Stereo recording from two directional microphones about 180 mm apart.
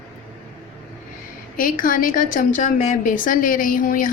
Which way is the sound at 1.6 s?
50° left (ahead or behind).